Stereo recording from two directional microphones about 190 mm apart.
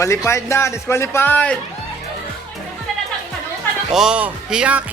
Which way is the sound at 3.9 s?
5° right (ahead or behind).